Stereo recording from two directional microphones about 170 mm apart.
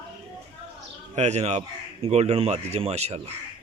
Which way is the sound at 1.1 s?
40° right (ahead or behind).